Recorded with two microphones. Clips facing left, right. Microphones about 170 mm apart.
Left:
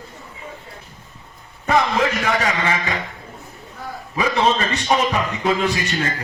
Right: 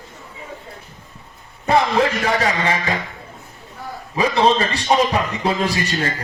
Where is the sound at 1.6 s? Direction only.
35° right (ahead or behind).